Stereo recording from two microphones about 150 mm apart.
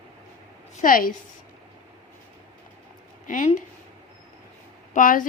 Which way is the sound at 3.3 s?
60° left (ahead or behind).